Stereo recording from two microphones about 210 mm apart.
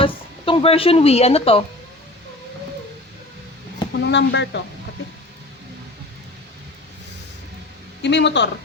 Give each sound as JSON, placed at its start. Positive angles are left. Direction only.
{"t": 0.0, "sound": "speech", "side_deg": 25}
{"t": 4.0, "sound": "speech", "side_deg": 55}
{"t": 8.0, "sound": "speech", "side_deg": 55}